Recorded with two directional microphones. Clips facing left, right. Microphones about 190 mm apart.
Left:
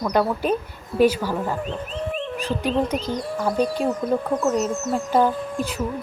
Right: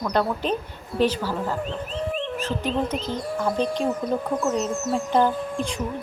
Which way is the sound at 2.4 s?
10° left (ahead or behind).